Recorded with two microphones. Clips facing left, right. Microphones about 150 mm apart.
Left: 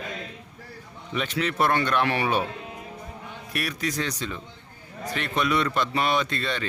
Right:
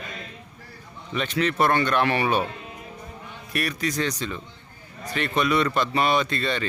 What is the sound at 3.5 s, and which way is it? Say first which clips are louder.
A man's voice: right 2 dB; centre (ahead or behind).